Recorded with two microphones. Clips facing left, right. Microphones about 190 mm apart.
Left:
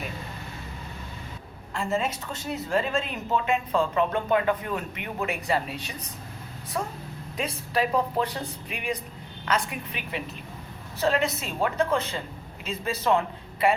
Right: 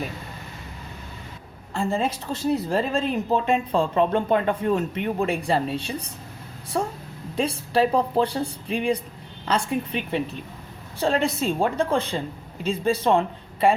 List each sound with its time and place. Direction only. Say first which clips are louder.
1.8 s a woman's voice: right 3 dB; 30° right (ahead or behind)
7.3 s a woman's voice: right 6 dB; 30° right (ahead or behind)